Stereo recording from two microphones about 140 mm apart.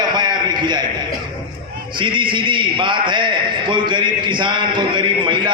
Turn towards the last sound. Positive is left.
turn(degrees=-35)  # may be behind; listen again after turning